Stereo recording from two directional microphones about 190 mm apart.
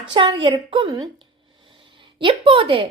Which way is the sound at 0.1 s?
25° right (ahead or behind).